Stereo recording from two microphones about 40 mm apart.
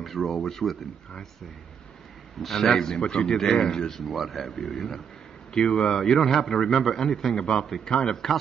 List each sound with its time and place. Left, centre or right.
0.0 s a man's voice: centre
2.4 s a man's voice: centre
4.1 s a man's voice: centre
5.5 s speech: centre
5.9 s a man's voice: centre
7.3 s speech: left